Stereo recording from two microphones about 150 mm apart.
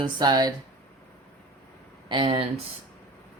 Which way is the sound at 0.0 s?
30° right (ahead or behind).